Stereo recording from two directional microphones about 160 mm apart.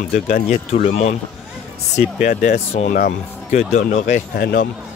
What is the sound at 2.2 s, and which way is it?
Speech, 50° left (ahead or behind).